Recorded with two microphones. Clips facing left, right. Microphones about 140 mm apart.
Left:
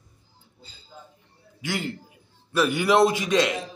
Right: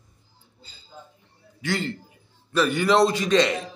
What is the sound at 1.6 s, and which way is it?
A man's voice, 10° left (ahead or behind).